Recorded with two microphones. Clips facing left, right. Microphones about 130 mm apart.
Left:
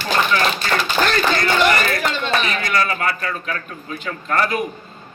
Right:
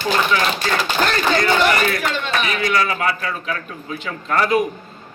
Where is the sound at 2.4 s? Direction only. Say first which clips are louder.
Right 1 dB; 10° right (ahead or behind).